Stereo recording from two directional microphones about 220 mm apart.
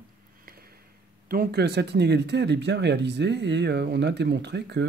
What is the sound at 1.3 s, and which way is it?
Speech, 45° right (ahead or behind).